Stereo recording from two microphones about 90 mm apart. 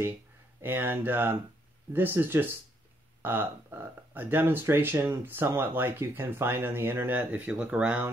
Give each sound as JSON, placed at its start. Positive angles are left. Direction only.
{"t": 0.6, "sound": "speech", "side_deg": -25}